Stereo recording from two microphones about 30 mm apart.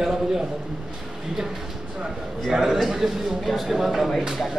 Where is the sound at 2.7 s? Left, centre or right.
Centre.